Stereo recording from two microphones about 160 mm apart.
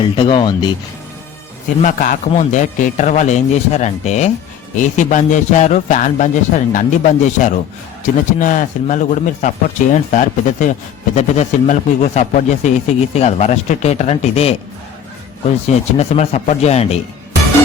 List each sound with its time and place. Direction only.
0.0 s speech: 30° left (ahead or behind)
1.8 s a man's voice: 55° left (ahead or behind)
15.6 s a man's voice: 40° left (ahead or behind)